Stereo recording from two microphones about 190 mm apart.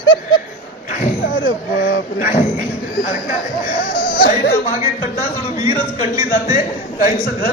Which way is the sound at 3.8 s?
50° left (ahead or behind).